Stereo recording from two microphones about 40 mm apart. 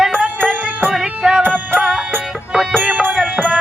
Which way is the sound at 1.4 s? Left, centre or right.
Right.